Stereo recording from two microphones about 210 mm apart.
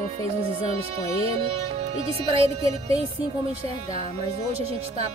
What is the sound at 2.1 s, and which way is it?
Speech, 30° right (ahead or behind).